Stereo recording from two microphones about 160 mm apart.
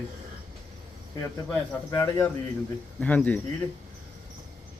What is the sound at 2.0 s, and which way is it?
Speech, 15° left (ahead or behind).